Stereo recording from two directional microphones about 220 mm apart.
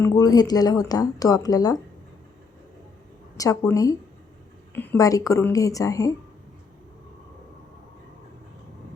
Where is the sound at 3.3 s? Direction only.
15° left (ahead or behind).